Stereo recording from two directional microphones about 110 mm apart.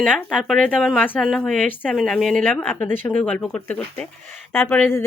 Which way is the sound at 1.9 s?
Centre (ahead or behind).